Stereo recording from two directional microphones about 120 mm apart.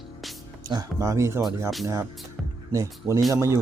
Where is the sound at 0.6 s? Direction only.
30° right (ahead or behind).